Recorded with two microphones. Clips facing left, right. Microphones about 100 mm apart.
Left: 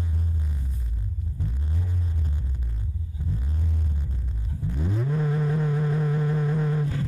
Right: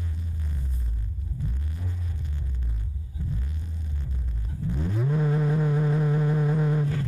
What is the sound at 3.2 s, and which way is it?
Throbbing, 15° left (ahead or behind).